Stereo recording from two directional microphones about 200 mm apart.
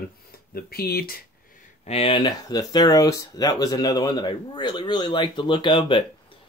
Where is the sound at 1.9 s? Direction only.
30° left (ahead or behind).